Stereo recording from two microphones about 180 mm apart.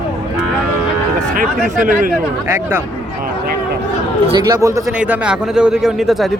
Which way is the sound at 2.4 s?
10° right (ahead or behind).